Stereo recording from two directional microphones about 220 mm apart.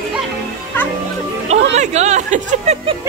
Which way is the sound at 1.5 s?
30° right (ahead or behind).